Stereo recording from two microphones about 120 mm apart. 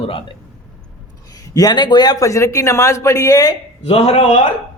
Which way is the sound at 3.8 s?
55° left (ahead or behind).